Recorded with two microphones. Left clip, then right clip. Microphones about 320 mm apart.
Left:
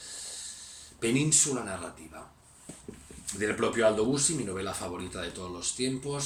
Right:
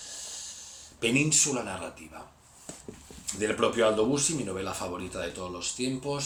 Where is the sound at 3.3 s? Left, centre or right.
Centre.